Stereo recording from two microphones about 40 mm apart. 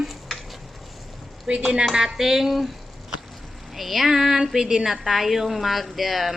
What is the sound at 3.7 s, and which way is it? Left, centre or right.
A woman's voice, centre.